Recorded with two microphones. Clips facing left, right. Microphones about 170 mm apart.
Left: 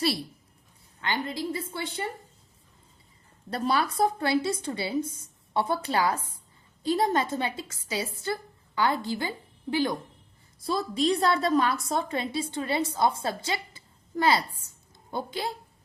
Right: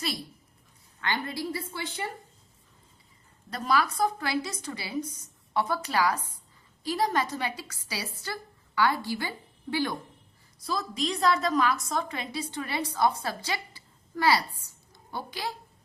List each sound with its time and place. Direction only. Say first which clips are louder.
1.0 s a woman's voice: left 1 dB; 20° left (ahead or behind)
3.5 s a woman's voice: left 1 dB; 30° left (ahead or behind)